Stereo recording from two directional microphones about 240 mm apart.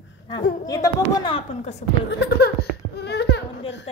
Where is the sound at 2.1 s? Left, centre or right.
Left.